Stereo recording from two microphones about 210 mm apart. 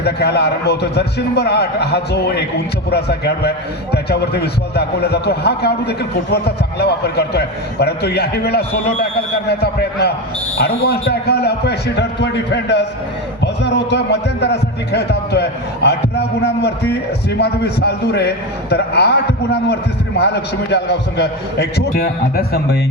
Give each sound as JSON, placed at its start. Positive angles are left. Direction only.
{"t": 0.0, "sound": "a man's voice", "side_deg": 50}